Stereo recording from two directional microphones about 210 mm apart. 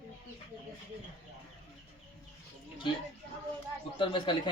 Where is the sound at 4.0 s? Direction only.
20° left (ahead or behind).